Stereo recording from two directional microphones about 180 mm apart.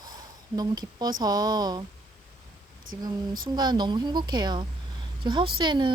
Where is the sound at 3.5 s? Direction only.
25° right (ahead or behind).